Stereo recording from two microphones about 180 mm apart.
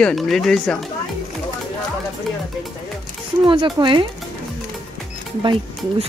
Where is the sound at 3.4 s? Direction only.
30° right (ahead or behind).